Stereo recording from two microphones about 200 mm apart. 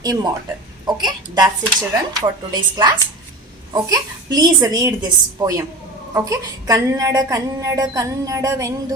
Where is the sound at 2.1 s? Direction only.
20° right (ahead or behind).